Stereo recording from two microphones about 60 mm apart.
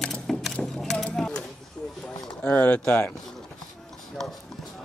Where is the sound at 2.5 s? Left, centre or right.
Left.